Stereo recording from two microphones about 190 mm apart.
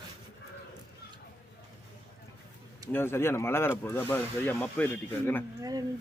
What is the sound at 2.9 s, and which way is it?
Speech, 10° left (ahead or behind).